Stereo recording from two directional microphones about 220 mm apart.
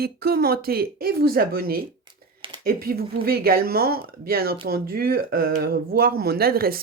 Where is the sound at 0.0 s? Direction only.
45° right (ahead or behind).